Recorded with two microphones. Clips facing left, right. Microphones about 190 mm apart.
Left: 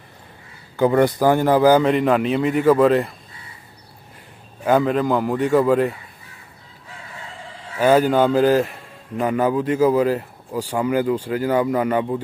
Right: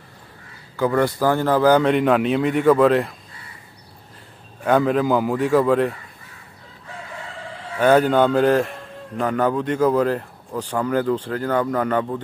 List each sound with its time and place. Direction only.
0.7 s a man's voice: 20° left (ahead or behind); by 3.2 s centre (ahead or behind)
4.6 s a man's voice: centre (ahead or behind)
7.8 s a man's voice: 5° left (ahead or behind)